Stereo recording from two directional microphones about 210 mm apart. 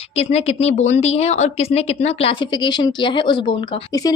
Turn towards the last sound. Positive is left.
turn(degrees=20)  # may be behind; listen again after turning